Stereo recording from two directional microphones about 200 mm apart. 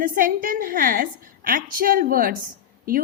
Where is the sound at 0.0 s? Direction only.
45° right (ahead or behind).